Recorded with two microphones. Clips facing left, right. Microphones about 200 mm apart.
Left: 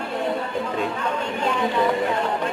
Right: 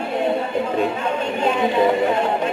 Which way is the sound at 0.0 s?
20° right (ahead or behind).